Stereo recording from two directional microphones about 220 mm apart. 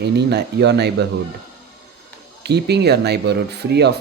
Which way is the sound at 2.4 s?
50° right (ahead or behind).